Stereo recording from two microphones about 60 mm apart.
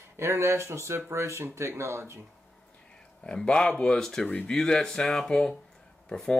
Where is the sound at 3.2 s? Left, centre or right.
Centre.